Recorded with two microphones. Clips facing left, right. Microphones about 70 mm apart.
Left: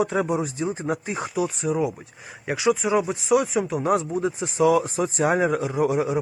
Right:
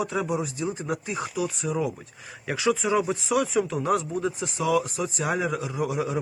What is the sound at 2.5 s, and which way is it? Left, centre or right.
Speech, centre.